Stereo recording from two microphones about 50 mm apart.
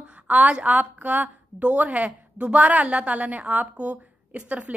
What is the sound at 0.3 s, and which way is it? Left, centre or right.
A woman's voice, right.